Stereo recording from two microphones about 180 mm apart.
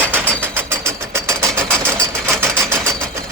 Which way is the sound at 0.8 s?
15° right (ahead or behind).